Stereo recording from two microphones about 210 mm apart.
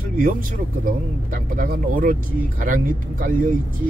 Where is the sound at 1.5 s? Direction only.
40° right (ahead or behind).